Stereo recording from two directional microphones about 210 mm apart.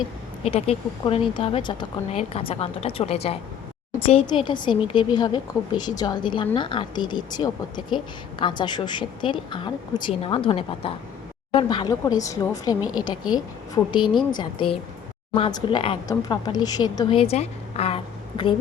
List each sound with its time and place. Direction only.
0.4 s a woman's voice: 30° left (ahead or behind)